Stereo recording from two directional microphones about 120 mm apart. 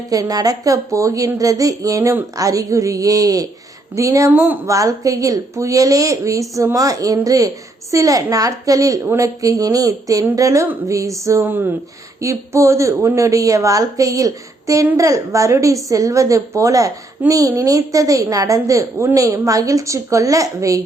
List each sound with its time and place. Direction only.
0.1 s a woman's voice: 30° right (ahead or behind)
11.4 s a woman's voice: 15° right (ahead or behind)